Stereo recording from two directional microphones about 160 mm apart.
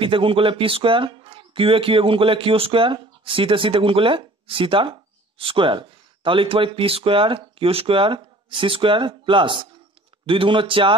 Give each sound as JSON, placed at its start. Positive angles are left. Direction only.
{"t": 0.0, "sound": "speech", "side_deg": -35}